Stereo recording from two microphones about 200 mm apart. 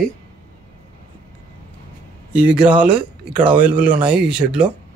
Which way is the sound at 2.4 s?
5° right (ahead or behind).